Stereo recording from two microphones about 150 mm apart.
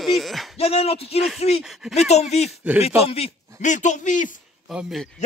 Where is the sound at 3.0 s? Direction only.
40° left (ahead or behind).